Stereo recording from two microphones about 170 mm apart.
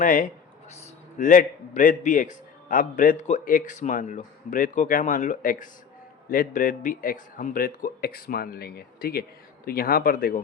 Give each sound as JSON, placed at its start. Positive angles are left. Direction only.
{"t": 0.0, "sound": "a man's voice", "side_deg": 55}